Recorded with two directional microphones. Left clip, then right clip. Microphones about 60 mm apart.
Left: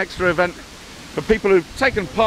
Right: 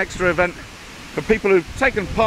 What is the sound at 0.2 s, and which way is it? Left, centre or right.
Speech, centre.